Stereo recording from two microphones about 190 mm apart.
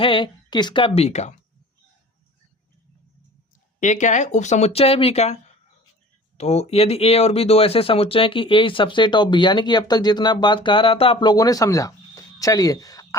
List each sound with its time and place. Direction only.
0.0 s speech: 25° left (ahead or behind)
3.8 s speech: 40° left (ahead or behind); by 13.1 s 20° left (ahead or behind)